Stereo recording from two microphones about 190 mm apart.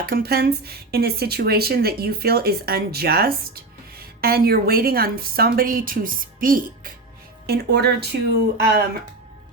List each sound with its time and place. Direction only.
0.0 s speech: 55° right (ahead or behind)